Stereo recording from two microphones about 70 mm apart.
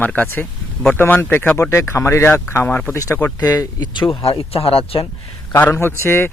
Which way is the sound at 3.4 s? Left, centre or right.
Left.